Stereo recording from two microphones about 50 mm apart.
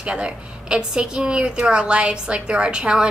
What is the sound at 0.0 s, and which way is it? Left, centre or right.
A woman's voice, centre.